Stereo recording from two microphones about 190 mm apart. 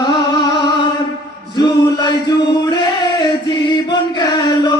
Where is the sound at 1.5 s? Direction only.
25° left (ahead or behind).